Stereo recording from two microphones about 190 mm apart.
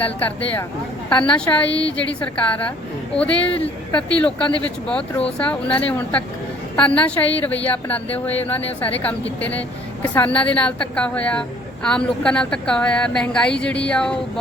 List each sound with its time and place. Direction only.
0.0 s a woman's voice: 10° left (ahead or behind)